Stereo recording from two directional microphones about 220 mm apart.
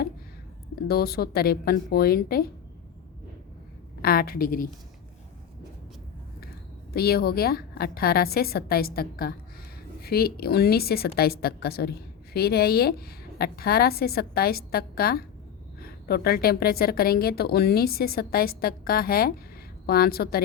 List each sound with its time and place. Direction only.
0.9 s a woman's voice: 45° left (ahead or behind)
4.0 s a woman's voice: 45° left (ahead or behind)
6.9 s a woman's voice: 45° left (ahead or behind)